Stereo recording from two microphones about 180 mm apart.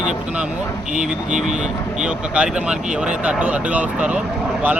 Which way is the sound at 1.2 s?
40° right (ahead or behind).